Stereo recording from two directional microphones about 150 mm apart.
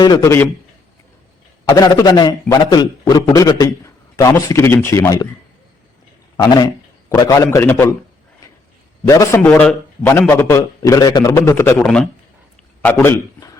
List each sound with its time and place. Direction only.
0.0 s a man's voice: 25° left (ahead or behind)
1.6 s a man's voice: 25° left (ahead or behind)
6.3 s a man's voice: 25° left (ahead or behind)
9.0 s a man's voice: 20° left (ahead or behind)